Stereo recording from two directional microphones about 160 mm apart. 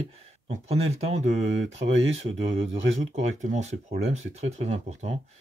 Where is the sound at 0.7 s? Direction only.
40° right (ahead or behind).